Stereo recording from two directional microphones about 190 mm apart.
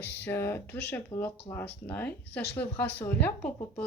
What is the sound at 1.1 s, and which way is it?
Speech, 30° left (ahead or behind).